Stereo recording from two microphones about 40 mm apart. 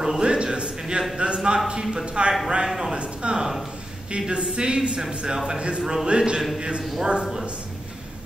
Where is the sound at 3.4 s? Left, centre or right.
Centre.